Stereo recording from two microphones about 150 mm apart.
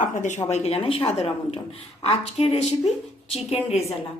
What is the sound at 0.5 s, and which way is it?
A woman's voice, 45° left (ahead or behind).